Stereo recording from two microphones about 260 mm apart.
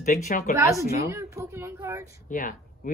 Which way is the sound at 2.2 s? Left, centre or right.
Left.